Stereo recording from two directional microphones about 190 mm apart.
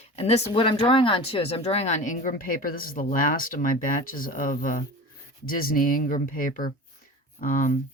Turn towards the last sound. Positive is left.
turn(degrees=45)  # may be behind; listen again after turning